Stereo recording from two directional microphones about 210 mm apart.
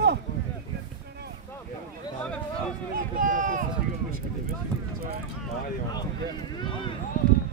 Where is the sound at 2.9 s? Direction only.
40° right (ahead or behind).